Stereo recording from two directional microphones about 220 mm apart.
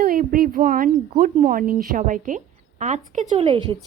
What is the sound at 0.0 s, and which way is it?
A woman's voice, 40° right (ahead or behind).